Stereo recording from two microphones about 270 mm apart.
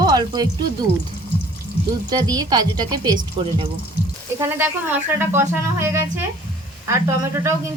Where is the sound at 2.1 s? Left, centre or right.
Centre.